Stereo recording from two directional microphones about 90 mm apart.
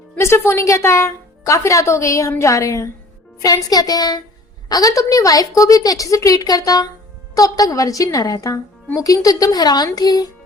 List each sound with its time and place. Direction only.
0.2 s a woman's voice: 30° left (ahead or behind)
3.4 s a woman's voice: 45° left (ahead or behind)